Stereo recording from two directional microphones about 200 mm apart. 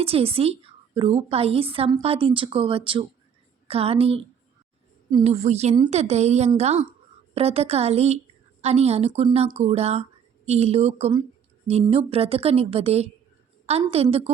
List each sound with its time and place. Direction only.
0.0 s a woman's voice: 30° right (ahead or behind)